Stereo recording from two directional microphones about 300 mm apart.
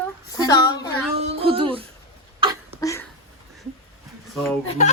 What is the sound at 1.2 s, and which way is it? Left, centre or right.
Speech, centre.